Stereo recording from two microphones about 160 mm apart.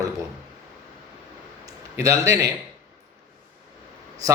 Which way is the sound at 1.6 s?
20° right (ahead or behind).